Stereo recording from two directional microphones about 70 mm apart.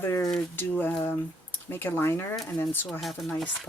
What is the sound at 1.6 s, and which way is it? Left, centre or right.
Speech, left.